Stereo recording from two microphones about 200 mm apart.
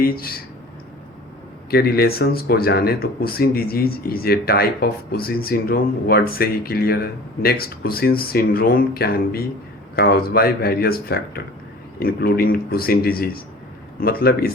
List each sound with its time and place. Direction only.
0.0 s speech: 50° left (ahead or behind)
1.7 s speech: 50° left (ahead or behind)